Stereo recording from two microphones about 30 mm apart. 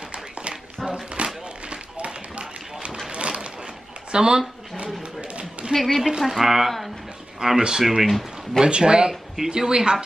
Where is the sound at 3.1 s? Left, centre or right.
Right.